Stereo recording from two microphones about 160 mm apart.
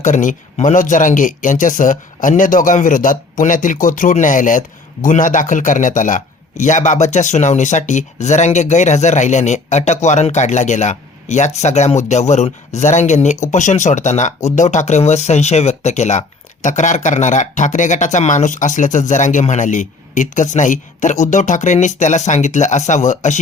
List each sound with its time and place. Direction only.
0.0 s a man's voice: 50° left (ahead or behind)